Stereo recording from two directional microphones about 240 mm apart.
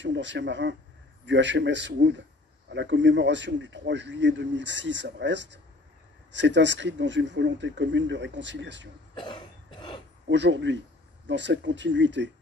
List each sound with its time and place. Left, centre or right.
0.0 s a man's voice: right
9.1 s cough: centre
10.3 s a man's voice: right